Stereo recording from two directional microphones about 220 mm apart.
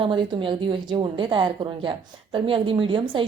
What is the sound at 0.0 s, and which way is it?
A woman's voice, 25° right (ahead or behind).